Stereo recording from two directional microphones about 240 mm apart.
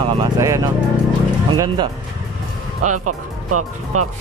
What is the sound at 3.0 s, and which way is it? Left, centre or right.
Speech, right.